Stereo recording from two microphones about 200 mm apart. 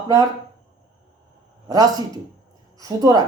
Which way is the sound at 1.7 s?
20° right (ahead or behind).